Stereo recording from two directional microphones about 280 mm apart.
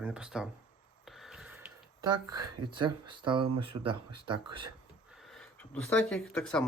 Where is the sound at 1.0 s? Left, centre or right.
Centre.